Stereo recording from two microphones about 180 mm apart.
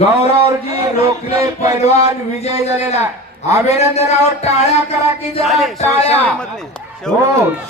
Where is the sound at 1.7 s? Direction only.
35° left (ahead or behind).